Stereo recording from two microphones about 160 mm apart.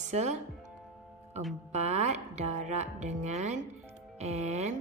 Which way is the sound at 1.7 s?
45° right (ahead or behind).